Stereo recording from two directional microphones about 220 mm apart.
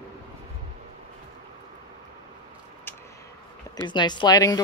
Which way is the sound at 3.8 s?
20° left (ahead or behind).